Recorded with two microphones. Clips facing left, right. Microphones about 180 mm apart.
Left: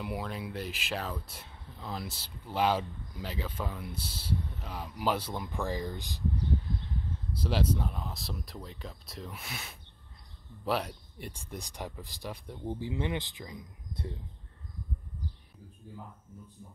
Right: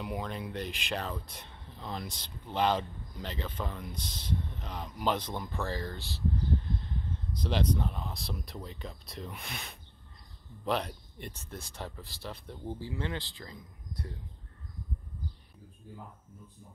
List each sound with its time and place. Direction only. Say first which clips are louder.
0.0 s speech: even; 5° left (ahead or behind)
7.3 s speech: even; 5° left (ahead or behind)